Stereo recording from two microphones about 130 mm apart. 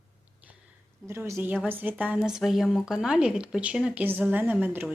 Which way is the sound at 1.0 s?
20° right (ahead or behind).